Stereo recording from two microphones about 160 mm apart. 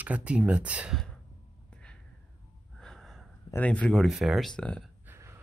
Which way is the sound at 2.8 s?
5° left (ahead or behind).